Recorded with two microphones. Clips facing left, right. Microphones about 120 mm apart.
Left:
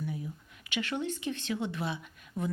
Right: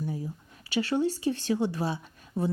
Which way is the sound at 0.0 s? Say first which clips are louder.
Right 3 dB; 35° right (ahead or behind).